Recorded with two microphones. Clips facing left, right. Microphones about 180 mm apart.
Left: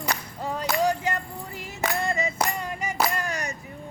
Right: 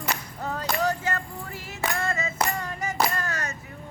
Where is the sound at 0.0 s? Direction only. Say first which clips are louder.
Left 1 dB; 10° left (ahead or behind).